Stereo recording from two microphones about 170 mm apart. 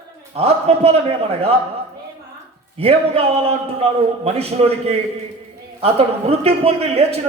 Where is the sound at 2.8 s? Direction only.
35° right (ahead or behind).